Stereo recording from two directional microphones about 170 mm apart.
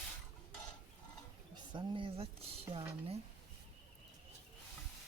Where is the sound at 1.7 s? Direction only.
30° right (ahead or behind).